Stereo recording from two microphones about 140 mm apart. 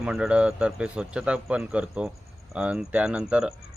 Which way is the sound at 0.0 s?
5° right (ahead or behind).